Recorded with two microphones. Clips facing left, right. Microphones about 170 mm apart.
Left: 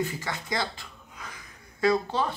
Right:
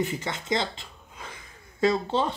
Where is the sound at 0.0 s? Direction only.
20° right (ahead or behind).